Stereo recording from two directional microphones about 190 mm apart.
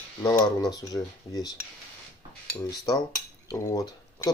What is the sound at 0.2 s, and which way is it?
Speech, 20° left (ahead or behind).